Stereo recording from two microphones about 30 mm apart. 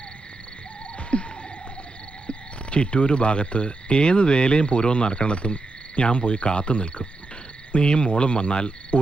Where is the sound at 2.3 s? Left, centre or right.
Left.